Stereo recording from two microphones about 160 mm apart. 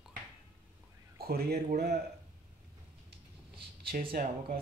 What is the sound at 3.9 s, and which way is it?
Speech, 65° right (ahead or behind).